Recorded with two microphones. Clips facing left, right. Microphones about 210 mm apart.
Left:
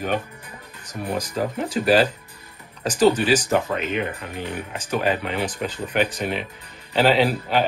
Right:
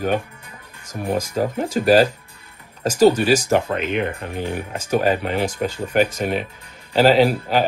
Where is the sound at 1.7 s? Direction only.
45° right (ahead or behind).